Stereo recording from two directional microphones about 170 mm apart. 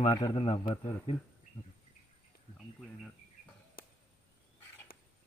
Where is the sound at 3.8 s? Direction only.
60° left (ahead or behind).